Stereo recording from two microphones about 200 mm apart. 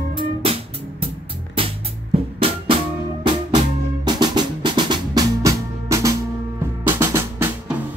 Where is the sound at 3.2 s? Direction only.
25° right (ahead or behind); by 7.8 s 10° right (ahead or behind).